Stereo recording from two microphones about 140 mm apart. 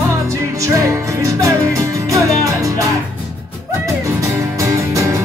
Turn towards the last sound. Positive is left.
turn(degrees=-20)  # may be behind; listen again after turning